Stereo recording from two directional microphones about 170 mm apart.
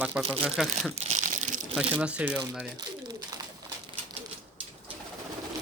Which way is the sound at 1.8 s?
5° right (ahead or behind).